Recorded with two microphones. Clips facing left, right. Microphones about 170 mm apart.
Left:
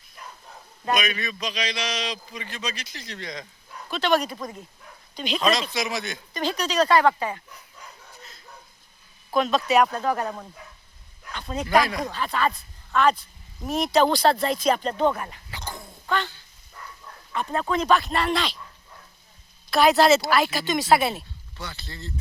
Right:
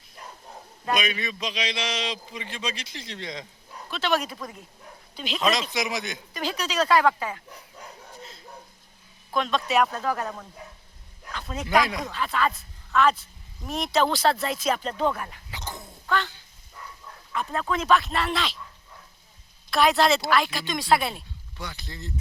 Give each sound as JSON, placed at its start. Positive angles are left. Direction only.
{"t": 0.2, "sound": "bow-wow", "side_deg": -30}
{"t": 1.2, "sound": "a man's voice", "side_deg": -25}
{"t": 3.8, "sound": "speech", "side_deg": 0}
{"t": 5.5, "sound": "a man's voice", "side_deg": -20}
{"t": 6.3, "sound": "speech", "side_deg": -5}
{"t": 7.5, "sound": "bow-wow", "side_deg": -30}
{"t": 9.3, "sound": "speech", "side_deg": 5}
{"t": 11.3, "sound": "speech", "side_deg": 0}
{"t": 15.4, "sound": "speech", "side_deg": -20}
{"t": 16.0, "sound": "speech", "side_deg": 15}
{"t": 17.3, "sound": "speech", "side_deg": 0}
{"t": 19.7, "sound": "speech", "side_deg": 0}
{"t": 21.6, "sound": "a man's voice", "side_deg": -15}